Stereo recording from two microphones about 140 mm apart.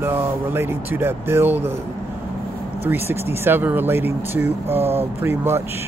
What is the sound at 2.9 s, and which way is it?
Speech, 15° right (ahead or behind).